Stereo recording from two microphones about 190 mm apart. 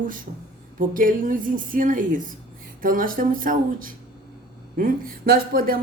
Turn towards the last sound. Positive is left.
turn(degrees=-50)  # may be behind; listen again after turning